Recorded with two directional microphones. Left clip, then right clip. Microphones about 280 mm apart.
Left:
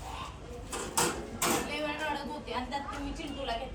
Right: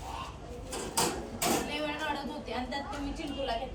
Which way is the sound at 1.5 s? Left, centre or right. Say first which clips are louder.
Even; left.